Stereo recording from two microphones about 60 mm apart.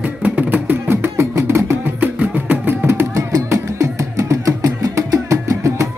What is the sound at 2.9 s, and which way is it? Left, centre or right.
Music, right.